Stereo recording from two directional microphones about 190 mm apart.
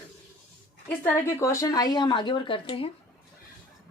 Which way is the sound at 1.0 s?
10° left (ahead or behind).